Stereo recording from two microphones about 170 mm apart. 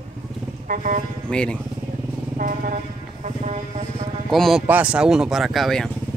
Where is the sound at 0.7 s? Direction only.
50° right (ahead or behind).